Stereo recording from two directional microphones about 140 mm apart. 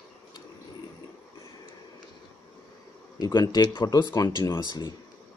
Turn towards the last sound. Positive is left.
turn(degrees=25)  # may be behind; listen again after turning